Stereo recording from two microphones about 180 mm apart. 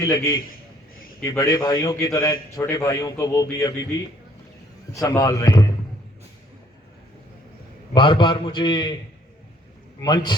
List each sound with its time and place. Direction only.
0.0 s a man's voice: 20° left (ahead or behind)
4.9 s speech: 15° left (ahead or behind)
7.9 s a man's voice: 25° left (ahead or behind)
10.0 s a man's voice: 25° left (ahead or behind)